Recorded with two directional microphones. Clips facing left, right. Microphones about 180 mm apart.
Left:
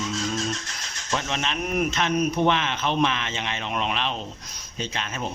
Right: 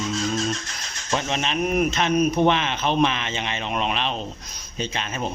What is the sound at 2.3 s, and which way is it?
Speech, 30° right (ahead or behind).